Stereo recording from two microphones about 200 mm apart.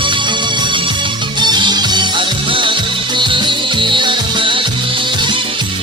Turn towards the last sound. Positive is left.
turn(degrees=-25)  # may be behind; listen again after turning